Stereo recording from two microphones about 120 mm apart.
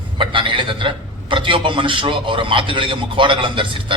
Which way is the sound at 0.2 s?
45° right (ahead or behind).